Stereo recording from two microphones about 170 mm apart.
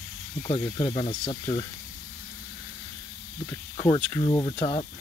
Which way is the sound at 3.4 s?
25° left (ahead or behind).